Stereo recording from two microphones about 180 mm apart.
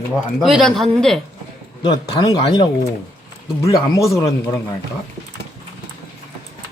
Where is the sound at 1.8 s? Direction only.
25° left (ahead or behind).